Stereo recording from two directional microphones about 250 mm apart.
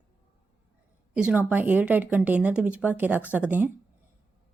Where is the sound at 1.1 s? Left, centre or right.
Centre.